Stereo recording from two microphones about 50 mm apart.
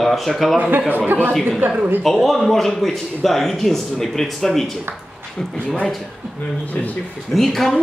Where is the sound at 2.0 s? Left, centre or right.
Centre.